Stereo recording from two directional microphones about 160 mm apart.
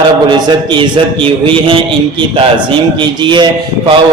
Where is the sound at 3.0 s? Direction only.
30° right (ahead or behind).